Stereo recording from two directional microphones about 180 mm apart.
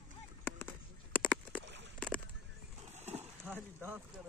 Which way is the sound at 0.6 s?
10° left (ahead or behind).